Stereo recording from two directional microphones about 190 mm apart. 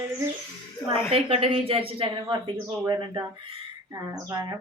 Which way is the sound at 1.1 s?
30° right (ahead or behind).